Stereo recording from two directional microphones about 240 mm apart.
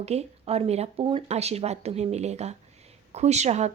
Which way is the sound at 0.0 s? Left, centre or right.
Right.